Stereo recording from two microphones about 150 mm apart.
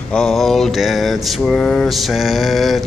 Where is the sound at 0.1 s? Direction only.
5° left (ahead or behind).